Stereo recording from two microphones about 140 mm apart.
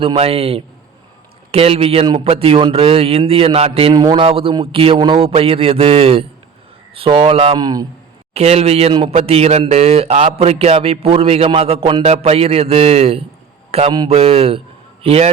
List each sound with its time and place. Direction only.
0.0 s speech: 45° right (ahead or behind)
3.9 s a man's voice: 30° right (ahead or behind)
4.2 s a man's voice: 40° right (ahead or behind)
7.5 s a man's voice: 30° right (ahead or behind)
8.3 s speech: 50° right (ahead or behind)